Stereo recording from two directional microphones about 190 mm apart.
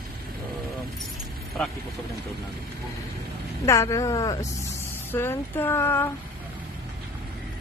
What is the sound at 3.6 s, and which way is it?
Female singing, 15° left (ahead or behind).